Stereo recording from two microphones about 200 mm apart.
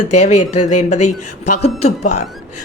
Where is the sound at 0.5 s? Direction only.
35° left (ahead or behind).